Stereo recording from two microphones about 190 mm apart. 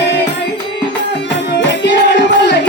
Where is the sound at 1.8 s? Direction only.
65° left (ahead or behind).